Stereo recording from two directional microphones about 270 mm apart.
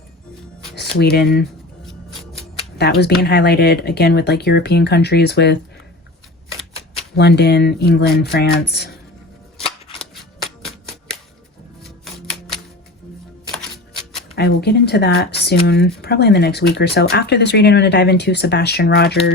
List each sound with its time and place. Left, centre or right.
1.1 s speech: left
2.7 s speech: left
7.2 s speech: left
10.0 s a sound: centre
11.8 s music: centre
14.3 s speech: left